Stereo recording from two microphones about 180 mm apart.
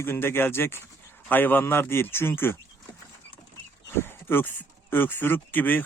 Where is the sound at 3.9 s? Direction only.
15° left (ahead or behind).